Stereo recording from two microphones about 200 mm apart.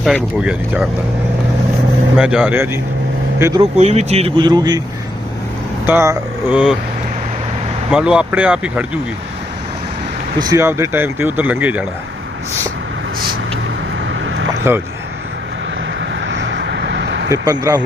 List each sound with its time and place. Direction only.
0.0 s speech: centre (ahead or behind)
2.1 s speech: 5° right (ahead or behind)
3.6 s speech: 30° right (ahead or behind)
5.8 s speech: 10° right (ahead or behind)
7.9 s speech: 5° right (ahead or behind)
10.3 s speech: 20° right (ahead or behind)
14.1 s vehicle: 70° right (ahead or behind)
16.0 s vehicle: 65° right (ahead or behind)
17.3 s speech: 20° right (ahead or behind)